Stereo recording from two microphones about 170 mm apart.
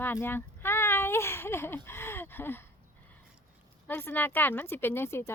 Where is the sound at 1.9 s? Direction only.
15° left (ahead or behind).